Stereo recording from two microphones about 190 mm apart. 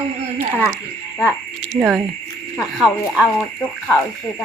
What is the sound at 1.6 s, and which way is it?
Speech, 5° left (ahead or behind).